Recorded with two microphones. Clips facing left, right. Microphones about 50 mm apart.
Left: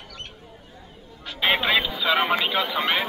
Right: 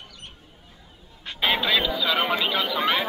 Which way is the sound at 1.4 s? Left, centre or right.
Left.